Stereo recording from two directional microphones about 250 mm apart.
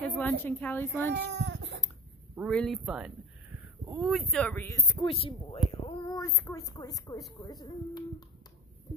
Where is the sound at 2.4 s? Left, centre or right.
Centre.